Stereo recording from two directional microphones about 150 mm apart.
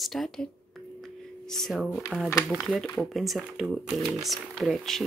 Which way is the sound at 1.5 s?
Centre (ahead or behind).